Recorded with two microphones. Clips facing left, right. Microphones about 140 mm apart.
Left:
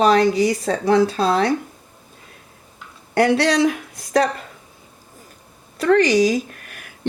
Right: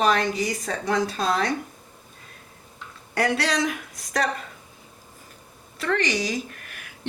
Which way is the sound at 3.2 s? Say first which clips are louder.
Left 8 dB; 30° left (ahead or behind).